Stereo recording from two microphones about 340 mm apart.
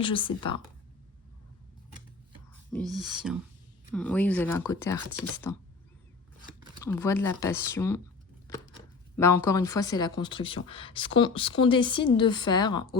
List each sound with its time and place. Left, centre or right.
0.0 s speech: centre
2.7 s speech: centre
6.8 s speech: centre
9.1 s speech: centre